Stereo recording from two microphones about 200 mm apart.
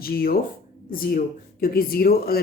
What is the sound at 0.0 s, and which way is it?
Speech, 50° left (ahead or behind).